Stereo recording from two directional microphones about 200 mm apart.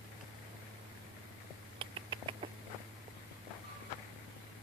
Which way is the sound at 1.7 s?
25° right (ahead or behind).